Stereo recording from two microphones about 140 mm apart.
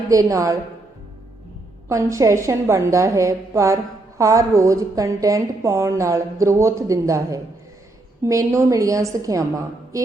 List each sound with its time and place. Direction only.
0.1 s a woman's voice: 25° right (ahead or behind)
1.9 s a woman's voice: 20° right (ahead or behind)